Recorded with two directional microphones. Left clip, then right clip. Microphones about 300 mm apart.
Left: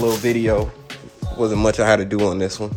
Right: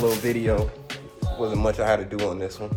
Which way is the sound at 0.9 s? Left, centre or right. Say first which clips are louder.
Even; centre.